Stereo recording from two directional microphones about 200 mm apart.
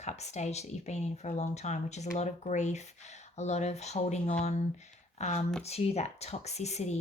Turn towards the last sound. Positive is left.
turn(degrees=35)  # may be behind; listen again after turning